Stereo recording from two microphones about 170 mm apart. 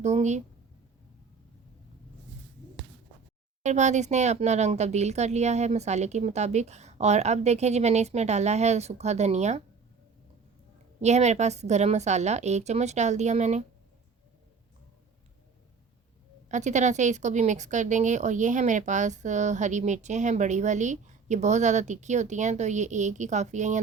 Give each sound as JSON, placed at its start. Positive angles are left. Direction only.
{"t": 0.0, "sound": "a woman's voice", "side_deg": -45}
{"t": 3.6, "sound": "speech", "side_deg": -45}
{"t": 11.0, "sound": "speech", "side_deg": -40}
{"t": 16.5, "sound": "a woman's voice", "side_deg": -45}